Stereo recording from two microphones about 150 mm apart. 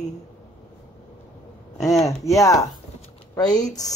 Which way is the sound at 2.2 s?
20° left (ahead or behind).